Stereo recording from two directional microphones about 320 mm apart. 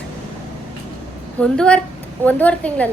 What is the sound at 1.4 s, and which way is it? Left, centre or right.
A woman's voice, centre.